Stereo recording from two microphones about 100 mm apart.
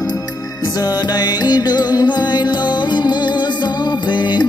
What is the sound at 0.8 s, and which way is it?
Music, 45° left (ahead or behind).